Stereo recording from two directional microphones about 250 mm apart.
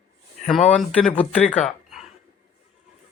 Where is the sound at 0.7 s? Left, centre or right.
Centre.